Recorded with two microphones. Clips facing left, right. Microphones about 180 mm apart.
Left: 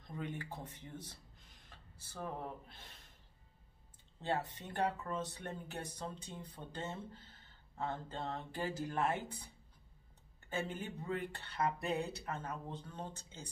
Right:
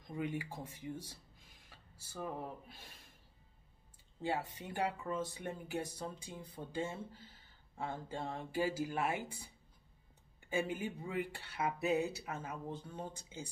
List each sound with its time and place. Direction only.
0.0 s speech: 10° right (ahead or behind)
4.2 s speech: 10° right (ahead or behind)
10.4 s speech: 10° right (ahead or behind)